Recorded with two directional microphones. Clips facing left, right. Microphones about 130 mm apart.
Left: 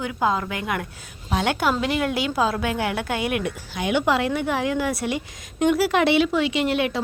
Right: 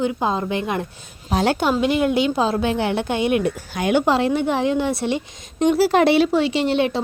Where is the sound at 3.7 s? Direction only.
45° right (ahead or behind).